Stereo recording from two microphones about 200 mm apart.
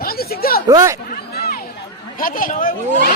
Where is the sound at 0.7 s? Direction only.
15° right (ahead or behind).